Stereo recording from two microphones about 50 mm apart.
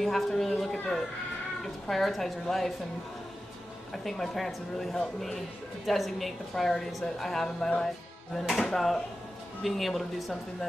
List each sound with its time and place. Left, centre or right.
0.0 s a woman's voice: centre
3.9 s a woman's voice: centre